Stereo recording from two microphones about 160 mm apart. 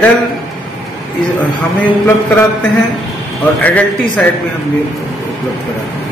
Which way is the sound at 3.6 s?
10° left (ahead or behind).